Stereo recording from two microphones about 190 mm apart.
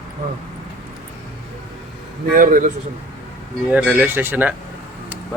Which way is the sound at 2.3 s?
45° right (ahead or behind).